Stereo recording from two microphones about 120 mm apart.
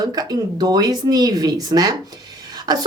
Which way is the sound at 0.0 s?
35° right (ahead or behind).